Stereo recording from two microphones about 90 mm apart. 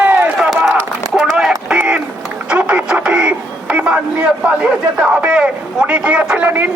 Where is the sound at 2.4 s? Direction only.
15° right (ahead or behind).